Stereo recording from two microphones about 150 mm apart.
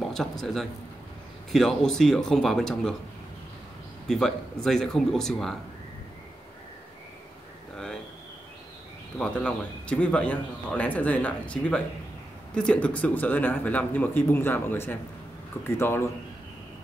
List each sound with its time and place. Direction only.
0.0 s a man's voice: centre (ahead or behind)
4.1 s speech: 5° left (ahead or behind)
7.7 s a sound: 5° left (ahead or behind)
9.2 s speech: 5° left (ahead or behind)